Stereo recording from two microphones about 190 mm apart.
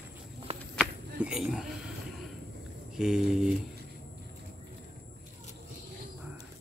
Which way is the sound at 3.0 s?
5° right (ahead or behind).